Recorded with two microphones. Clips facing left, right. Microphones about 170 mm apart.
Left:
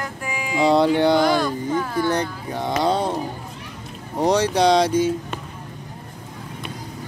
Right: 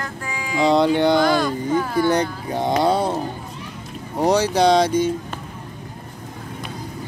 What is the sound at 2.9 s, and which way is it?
Speech, 5° right (ahead or behind).